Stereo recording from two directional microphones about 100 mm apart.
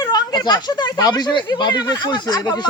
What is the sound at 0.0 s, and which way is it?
Speech, 45° left (ahead or behind).